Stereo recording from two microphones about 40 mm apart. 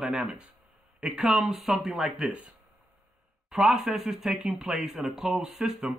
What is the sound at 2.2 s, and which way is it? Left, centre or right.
Speech, right.